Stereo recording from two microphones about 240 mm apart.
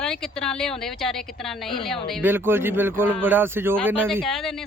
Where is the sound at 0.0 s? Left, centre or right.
Centre.